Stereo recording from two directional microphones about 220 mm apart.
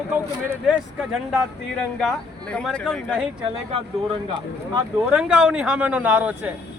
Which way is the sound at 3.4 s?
25° right (ahead or behind).